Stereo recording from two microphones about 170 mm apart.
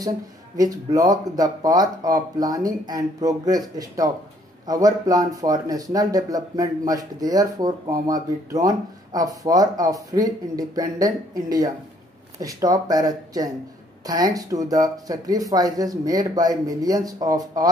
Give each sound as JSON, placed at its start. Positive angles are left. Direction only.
{"t": 0.6, "sound": "speech", "side_deg": -20}